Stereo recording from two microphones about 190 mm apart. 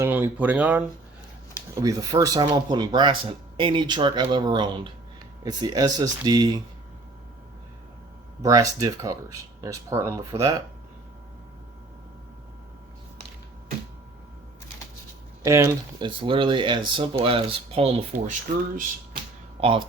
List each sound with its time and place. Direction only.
0.0 s speech: 10° right (ahead or behind)
8.4 s speech: 20° right (ahead or behind)
15.4 s speech: 15° right (ahead or behind); by 18.3 s 35° right (ahead or behind)
19.6 s speech: 30° right (ahead or behind)